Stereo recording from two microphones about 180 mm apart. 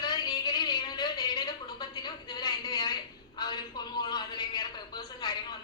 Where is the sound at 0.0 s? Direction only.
25° left (ahead or behind).